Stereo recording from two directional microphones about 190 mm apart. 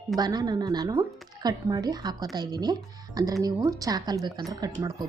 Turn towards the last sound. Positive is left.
turn(degrees=-20)  # may be behind; listen again after turning